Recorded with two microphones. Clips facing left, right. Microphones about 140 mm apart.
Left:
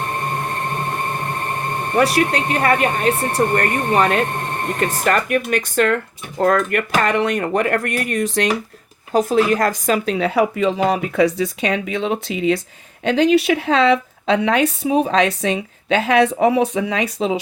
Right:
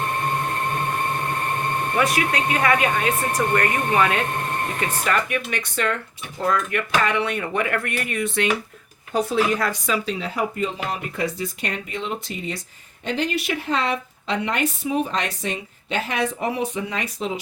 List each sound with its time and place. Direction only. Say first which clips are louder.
2.0 s speech: left 6 dB; 35° left (ahead or behind); by 17.4 s 90° left